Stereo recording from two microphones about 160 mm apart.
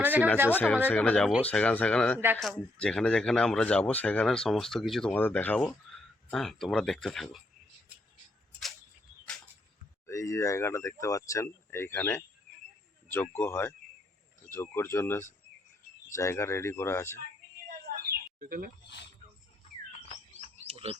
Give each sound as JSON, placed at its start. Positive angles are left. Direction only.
{"t": 0.0, "sound": "a sound", "side_deg": -10}
{"t": 0.5, "sound": "speech", "side_deg": 5}
{"t": 10.1, "sound": "speech", "side_deg": 20}
{"t": 13.3, "sound": "speech", "side_deg": 15}
{"t": 17.9, "sound": "a sound", "side_deg": -60}
{"t": 18.3, "sound": "speech", "side_deg": -60}
{"t": 20.7, "sound": "frog", "side_deg": -35}